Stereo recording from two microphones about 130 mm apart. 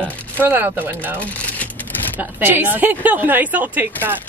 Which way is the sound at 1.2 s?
10° left (ahead or behind).